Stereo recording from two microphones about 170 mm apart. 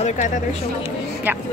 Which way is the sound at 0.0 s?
45° left (ahead or behind).